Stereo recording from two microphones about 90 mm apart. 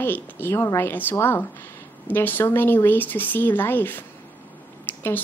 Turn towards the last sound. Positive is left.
turn(degrees=25)  # may be behind; listen again after turning